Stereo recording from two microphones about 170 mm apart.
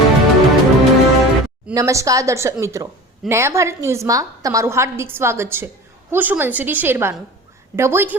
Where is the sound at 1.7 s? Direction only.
20° right (ahead or behind).